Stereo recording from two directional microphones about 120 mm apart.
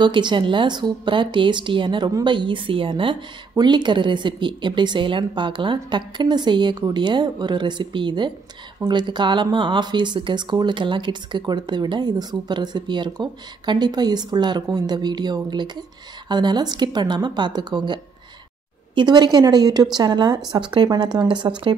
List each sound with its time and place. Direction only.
0.0 s speech: 40° right (ahead or behind)